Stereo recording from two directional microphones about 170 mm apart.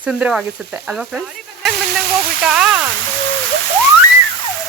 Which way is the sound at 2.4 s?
5° right (ahead or behind).